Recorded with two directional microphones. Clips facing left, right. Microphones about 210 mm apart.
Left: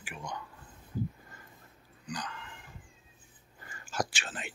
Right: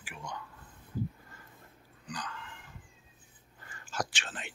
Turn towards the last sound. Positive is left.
turn(degrees=5)  # may be behind; listen again after turning